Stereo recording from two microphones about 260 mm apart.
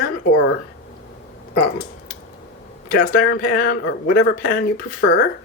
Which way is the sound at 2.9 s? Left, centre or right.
Left.